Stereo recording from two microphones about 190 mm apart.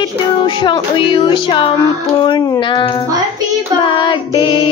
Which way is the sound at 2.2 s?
20° left (ahead or behind).